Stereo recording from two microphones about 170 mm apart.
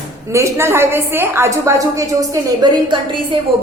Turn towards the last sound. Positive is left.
turn(degrees=-25)  # may be behind; listen again after turning